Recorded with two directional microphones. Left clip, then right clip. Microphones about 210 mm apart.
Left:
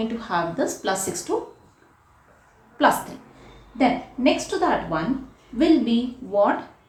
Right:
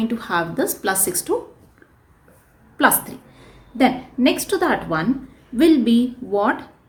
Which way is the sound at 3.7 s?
40° right (ahead or behind).